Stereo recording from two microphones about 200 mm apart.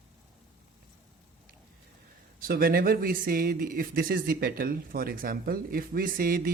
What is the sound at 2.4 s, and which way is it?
A man's voice, 45° right (ahead or behind).